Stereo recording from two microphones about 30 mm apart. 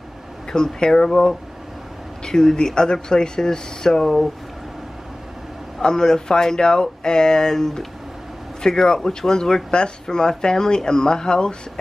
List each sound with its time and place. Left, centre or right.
0.5 s speech: left
5.8 s speech: left